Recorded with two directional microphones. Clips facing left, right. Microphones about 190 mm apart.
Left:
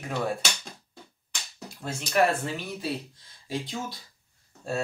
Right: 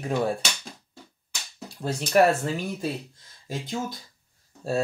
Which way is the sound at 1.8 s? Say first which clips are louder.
Right 4 dB; 35° right (ahead or behind).